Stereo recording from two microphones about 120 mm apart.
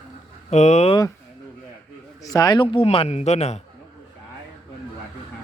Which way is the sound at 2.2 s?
30° left (ahead or behind).